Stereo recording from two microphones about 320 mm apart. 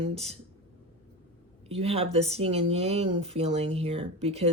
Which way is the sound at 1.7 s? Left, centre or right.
Centre.